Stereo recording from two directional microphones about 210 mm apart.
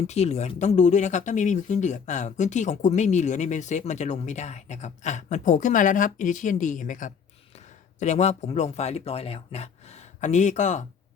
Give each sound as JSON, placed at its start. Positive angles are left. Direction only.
{"t": 0.1, "sound": "speech", "side_deg": 30}